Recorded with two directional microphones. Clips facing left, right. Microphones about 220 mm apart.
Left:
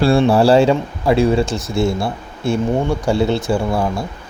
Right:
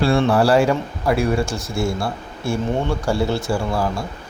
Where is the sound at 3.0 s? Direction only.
20° left (ahead or behind).